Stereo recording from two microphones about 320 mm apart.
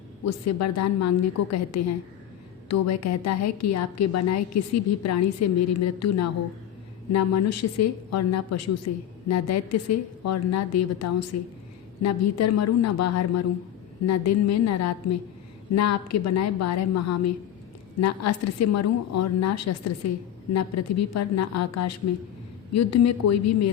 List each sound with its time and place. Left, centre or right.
0.4 s a woman's voice: left